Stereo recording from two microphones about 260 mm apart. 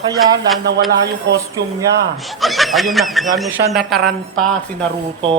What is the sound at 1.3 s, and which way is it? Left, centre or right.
Speech, right.